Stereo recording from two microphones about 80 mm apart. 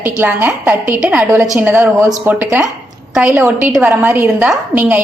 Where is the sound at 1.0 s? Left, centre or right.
Centre.